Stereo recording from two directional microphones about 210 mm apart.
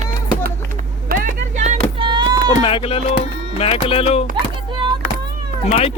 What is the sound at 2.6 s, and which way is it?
Music, 25° left (ahead or behind).